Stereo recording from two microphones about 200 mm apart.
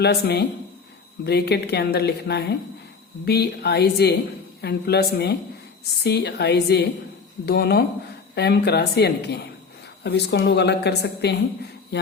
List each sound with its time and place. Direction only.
0.0 s a woman's voice: 55° left (ahead or behind)